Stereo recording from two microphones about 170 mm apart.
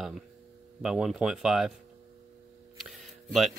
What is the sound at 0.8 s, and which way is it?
Speech, centre (ahead or behind).